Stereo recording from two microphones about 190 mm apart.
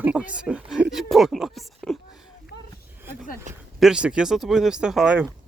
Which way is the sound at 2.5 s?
70° left (ahead or behind).